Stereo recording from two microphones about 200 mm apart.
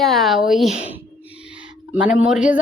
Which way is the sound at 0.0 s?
Centre (ahead or behind).